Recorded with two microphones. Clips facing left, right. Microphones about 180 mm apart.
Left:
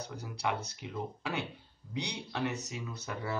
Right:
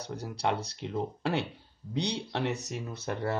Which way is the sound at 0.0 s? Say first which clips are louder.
Right 4 dB; 70° right (ahead or behind).